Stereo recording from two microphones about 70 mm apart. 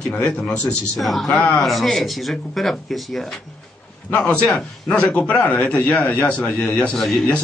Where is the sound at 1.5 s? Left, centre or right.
Centre.